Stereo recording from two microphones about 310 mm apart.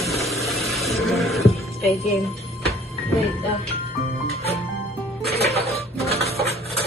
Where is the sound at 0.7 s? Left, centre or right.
Centre.